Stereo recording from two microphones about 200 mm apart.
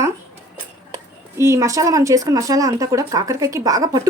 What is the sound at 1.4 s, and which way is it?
Speech, 15° right (ahead or behind).